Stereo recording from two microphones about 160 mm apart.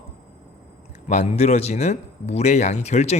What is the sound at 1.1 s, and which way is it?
A man's voice, 45° left (ahead or behind).